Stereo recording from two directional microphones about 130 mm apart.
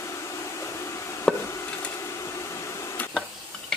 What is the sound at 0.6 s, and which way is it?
Hair dryer, 20° left (ahead or behind).